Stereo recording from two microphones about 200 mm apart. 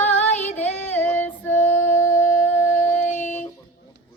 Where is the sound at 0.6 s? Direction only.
10° left (ahead or behind).